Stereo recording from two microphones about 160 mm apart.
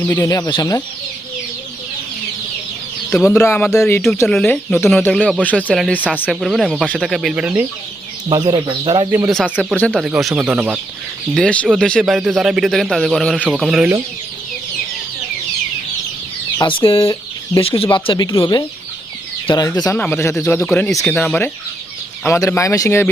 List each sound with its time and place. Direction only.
0.0 s speech: 15° left (ahead or behind)
3.2 s a man's voice: 15° left (ahead or behind); by 7.6 s 5° right (ahead or behind)
8.3 s speech: 30° right (ahead or behind)
9.0 s speech: 15° right (ahead or behind)
9.3 s a man's voice: centre (ahead or behind)
11.3 s a man's voice: 5° left (ahead or behind)
16.6 s speech: 30° left (ahead or behind)